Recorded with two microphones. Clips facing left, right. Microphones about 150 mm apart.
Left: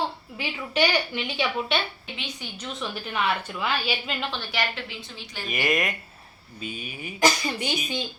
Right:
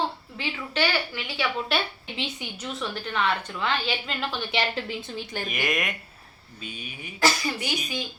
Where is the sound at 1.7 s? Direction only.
Centre (ahead or behind).